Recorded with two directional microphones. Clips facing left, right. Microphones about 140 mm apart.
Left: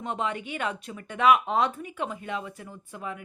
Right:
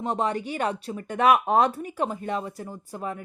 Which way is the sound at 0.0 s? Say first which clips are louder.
Right 4 dB; 35° right (ahead or behind).